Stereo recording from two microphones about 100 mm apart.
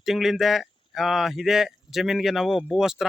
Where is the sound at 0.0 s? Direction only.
5° right (ahead or behind).